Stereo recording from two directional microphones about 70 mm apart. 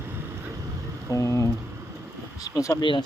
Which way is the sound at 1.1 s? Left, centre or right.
Left.